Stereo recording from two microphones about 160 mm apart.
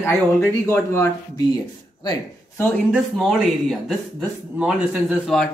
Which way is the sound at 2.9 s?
Centre (ahead or behind).